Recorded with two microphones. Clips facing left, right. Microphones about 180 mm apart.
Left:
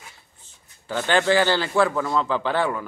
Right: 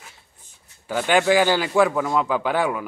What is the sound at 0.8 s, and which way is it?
A man's voice, 10° right (ahead or behind).